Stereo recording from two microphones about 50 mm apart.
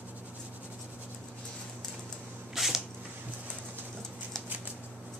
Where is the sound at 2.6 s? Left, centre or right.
Centre.